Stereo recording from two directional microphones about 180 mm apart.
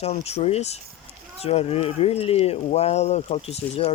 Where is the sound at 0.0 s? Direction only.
35° left (ahead or behind).